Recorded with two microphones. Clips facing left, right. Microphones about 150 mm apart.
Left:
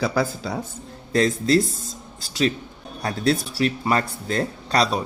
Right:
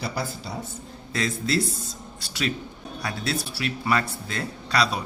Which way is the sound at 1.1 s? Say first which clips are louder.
Left 7 dB; 40° left (ahead or behind).